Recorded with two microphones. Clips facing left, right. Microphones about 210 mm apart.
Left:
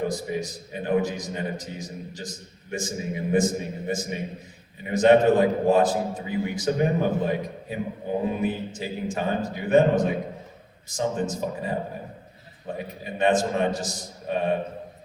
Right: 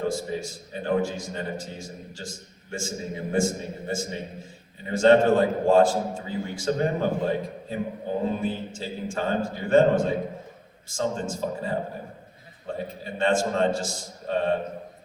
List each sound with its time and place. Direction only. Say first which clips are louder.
0.0 s a man's voice: even; 15° left (ahead or behind)